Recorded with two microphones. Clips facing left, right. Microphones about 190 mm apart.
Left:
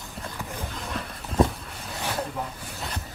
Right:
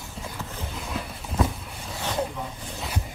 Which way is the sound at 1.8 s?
5° left (ahead or behind).